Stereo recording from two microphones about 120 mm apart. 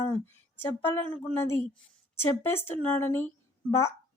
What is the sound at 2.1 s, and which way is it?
A woman's voice, 20° left (ahead or behind).